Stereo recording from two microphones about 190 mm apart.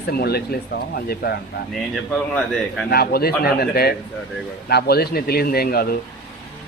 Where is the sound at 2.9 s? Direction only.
55° left (ahead or behind).